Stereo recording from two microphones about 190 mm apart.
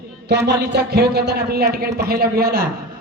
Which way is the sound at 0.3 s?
65° right (ahead or behind).